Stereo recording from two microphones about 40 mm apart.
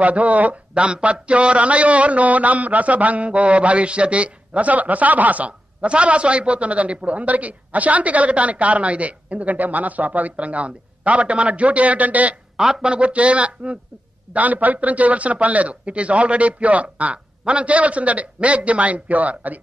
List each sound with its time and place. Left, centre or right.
0.0 s a man's voice: right
14.3 s a man's voice: right